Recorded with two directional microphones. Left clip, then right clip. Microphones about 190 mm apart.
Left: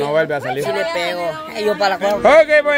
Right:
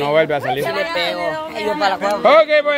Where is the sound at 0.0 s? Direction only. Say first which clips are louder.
Right 1 dB; 10° left (ahead or behind).